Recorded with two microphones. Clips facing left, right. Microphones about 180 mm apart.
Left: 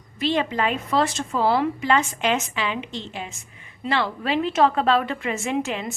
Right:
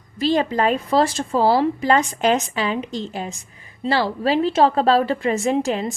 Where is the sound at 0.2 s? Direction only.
40° right (ahead or behind).